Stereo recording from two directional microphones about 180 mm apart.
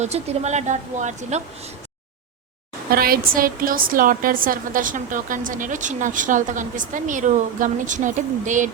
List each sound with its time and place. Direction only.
0.0 s a woman's voice: 35° right (ahead or behind)
2.9 s a woman's voice: 55° right (ahead or behind)